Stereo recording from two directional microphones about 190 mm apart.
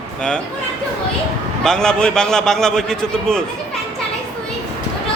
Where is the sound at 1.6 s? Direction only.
5° left (ahead or behind).